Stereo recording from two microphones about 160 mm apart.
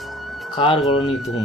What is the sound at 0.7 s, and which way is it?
Speech, centre (ahead or behind).